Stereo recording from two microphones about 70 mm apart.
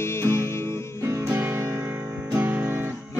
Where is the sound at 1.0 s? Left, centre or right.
Right.